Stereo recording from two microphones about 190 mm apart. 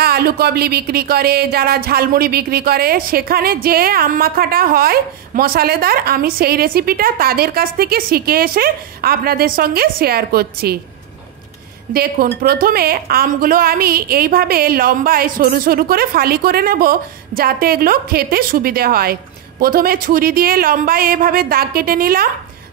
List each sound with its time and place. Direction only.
0.0 s speech: 55° right (ahead or behind)
11.9 s speech: 50° right (ahead or behind)